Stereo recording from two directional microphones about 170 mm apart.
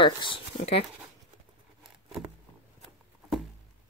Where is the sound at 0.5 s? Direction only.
35° left (ahead or behind).